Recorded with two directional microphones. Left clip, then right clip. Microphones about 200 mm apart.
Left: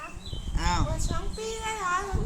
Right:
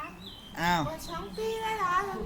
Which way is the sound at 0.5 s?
30° right (ahead or behind).